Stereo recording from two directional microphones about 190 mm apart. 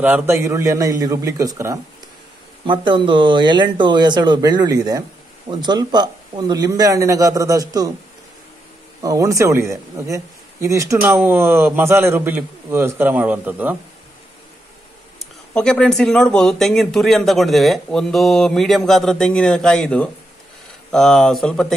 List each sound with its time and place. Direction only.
0.0 s speech: 10° right (ahead or behind)
9.0 s speech: 15° right (ahead or behind)
15.1 s speech: 5° left (ahead or behind)